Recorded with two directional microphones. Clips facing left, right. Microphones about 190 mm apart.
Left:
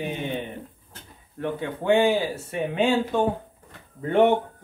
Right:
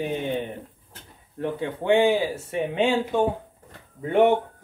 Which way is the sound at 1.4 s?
25° right (ahead or behind).